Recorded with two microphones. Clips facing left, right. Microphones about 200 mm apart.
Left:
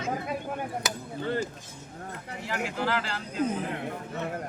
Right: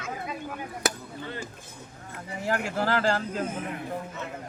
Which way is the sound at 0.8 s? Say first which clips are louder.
Right 4 dB; 50° right (ahead or behind).